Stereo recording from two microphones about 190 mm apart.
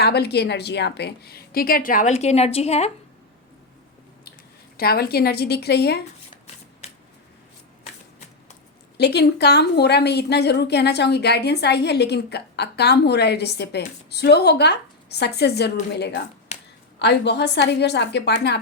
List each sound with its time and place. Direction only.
0.0 s a woman's voice: 60° left (ahead or behind); by 2.9 s 35° left (ahead or behind)
4.8 s a woman's voice: 55° left (ahead or behind)
9.0 s a woman's voice: 60° left (ahead or behind)
16.5 s a sound: 35° left (ahead or behind)
17.0 s a woman's voice: 65° left (ahead or behind)